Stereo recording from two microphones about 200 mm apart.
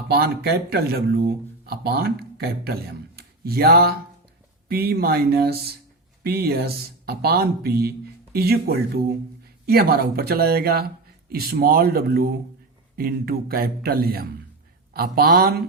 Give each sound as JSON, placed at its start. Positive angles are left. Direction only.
{"t": 0.1, "sound": "speech", "side_deg": -50}